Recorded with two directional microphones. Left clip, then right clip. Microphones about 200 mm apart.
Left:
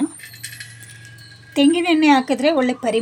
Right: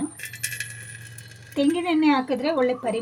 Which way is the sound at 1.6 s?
50° left (ahead or behind).